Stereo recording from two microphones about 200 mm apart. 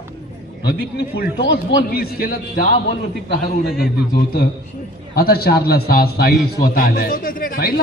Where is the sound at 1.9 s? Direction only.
50° left (ahead or behind).